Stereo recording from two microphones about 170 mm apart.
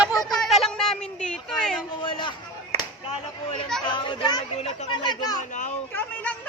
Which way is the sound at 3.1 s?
30° left (ahead or behind).